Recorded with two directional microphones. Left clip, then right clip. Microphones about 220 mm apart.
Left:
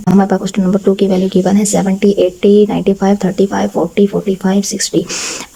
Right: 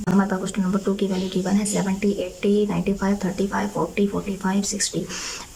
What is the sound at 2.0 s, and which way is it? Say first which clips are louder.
Speech: left 15 dB; 30° left (ahead or behind).